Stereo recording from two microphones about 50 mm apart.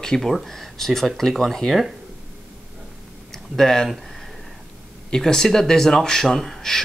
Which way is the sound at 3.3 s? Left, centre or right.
Centre.